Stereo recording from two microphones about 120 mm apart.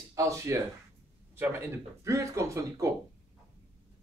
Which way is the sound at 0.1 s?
25° right (ahead or behind).